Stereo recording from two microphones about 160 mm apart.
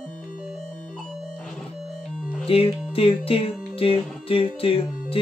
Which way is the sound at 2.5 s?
35° left (ahead or behind).